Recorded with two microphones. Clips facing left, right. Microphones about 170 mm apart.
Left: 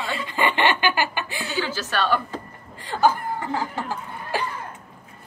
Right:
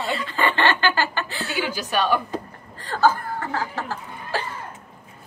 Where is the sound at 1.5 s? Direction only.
15° right (ahead or behind).